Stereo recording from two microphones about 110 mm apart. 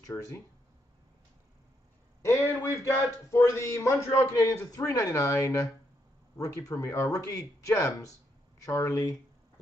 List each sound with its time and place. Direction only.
0.0 s speech: 30° left (ahead or behind)
2.2 s a man's voice: 25° left (ahead or behind)